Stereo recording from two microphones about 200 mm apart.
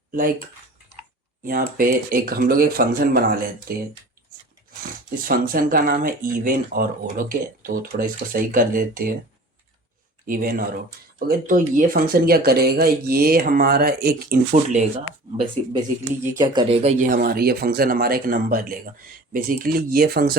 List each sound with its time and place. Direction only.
0.1 s speech: 45° right (ahead or behind)
1.5 s speech: 45° right (ahead or behind)
5.3 s speech: 45° right (ahead or behind)
10.2 s speech: 45° right (ahead or behind)
16.4 s speech: 20° right (ahead or behind); by 20.3 s 50° right (ahead or behind)